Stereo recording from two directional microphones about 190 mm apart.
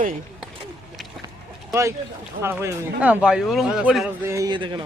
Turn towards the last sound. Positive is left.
turn(degrees=-25)  # may be behind; listen again after turning